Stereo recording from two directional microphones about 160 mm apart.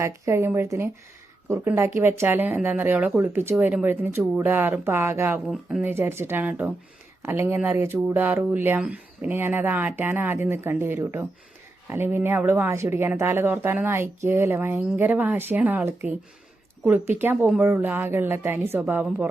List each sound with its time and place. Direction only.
0.0 s speech: 15° right (ahead or behind)
5.5 s speech: 5° right (ahead or behind)
5.9 s speech: 15° right (ahead or behind)